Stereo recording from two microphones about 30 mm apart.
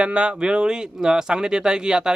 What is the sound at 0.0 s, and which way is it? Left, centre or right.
Speech, right.